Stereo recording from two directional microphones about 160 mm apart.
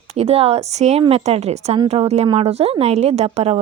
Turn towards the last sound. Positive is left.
turn(degrees=-40)  # may be behind; listen again after turning